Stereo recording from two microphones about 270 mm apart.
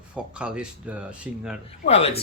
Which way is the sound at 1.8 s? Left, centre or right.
Left.